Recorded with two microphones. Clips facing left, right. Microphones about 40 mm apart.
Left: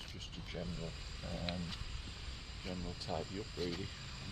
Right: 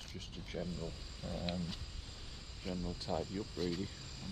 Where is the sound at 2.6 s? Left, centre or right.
Centre.